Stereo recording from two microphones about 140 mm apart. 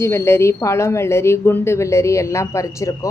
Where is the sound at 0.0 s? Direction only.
20° left (ahead or behind).